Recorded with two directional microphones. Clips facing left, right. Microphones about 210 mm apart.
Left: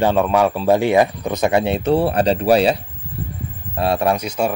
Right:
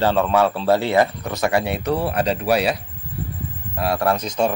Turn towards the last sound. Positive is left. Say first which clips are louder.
# even
turn(degrees=10)  # may be behind; listen again after turning